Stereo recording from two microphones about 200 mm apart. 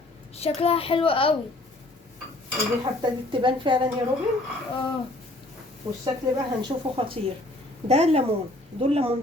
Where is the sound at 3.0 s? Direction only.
25° right (ahead or behind).